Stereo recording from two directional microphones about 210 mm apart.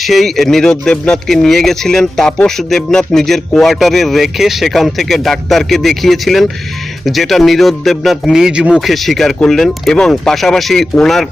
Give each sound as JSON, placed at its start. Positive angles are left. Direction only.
{"t": 0.0, "sound": "speech", "side_deg": 0}